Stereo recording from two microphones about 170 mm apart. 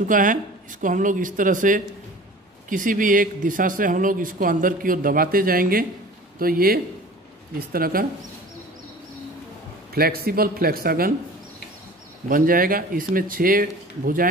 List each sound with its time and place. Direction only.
0.1 s speech: 50° right (ahead or behind)
9.9 s speech: 65° right (ahead or behind)
12.3 s speech: 55° right (ahead or behind)